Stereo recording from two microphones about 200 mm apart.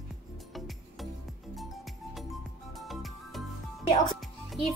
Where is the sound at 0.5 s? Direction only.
Centre (ahead or behind).